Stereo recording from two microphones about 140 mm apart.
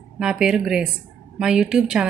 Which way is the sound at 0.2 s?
5° right (ahead or behind).